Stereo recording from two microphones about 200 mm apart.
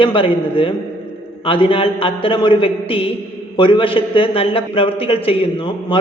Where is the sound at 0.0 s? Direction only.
25° left (ahead or behind).